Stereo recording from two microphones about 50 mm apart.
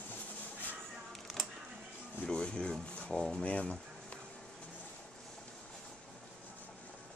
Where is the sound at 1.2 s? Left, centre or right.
Centre.